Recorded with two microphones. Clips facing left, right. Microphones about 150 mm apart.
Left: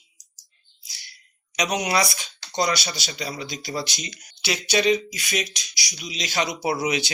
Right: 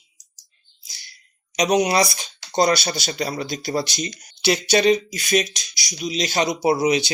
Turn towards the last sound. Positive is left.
turn(degrees=-35)  # may be behind; listen again after turning